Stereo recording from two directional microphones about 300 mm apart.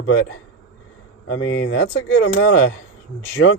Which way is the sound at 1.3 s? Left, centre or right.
Left.